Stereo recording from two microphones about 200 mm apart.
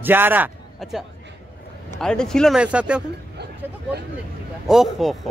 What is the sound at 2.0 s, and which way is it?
Speech, 5° left (ahead or behind).